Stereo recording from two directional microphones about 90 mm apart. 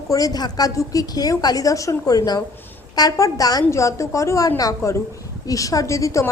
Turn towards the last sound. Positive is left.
turn(degrees=35)  # may be behind; listen again after turning